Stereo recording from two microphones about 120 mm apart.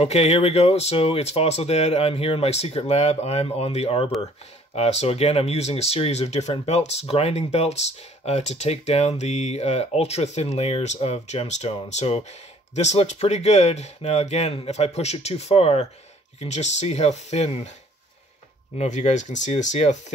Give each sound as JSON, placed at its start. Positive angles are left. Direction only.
{"t": 0.0, "sound": "speech", "side_deg": 60}
{"t": 16.3, "sound": "speech", "side_deg": 70}
{"t": 18.8, "sound": "speech", "side_deg": 80}